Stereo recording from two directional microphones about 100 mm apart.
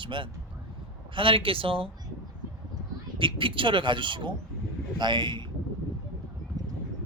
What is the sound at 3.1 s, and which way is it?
A man's voice, 60° right (ahead or behind).